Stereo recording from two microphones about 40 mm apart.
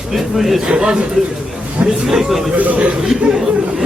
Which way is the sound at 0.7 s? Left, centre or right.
Right.